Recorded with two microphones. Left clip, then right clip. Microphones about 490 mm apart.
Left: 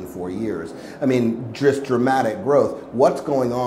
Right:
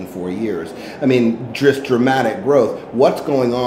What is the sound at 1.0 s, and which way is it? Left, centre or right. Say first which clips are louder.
Speech: right 5 dB; left.